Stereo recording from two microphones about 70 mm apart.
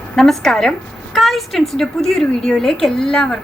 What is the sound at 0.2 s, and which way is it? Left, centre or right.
A woman's voice, centre.